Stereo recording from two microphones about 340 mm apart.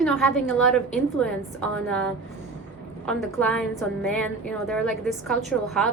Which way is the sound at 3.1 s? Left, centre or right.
Centre.